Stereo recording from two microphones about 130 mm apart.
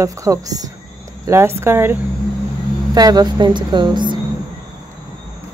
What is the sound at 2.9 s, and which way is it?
Speech, 30° right (ahead or behind).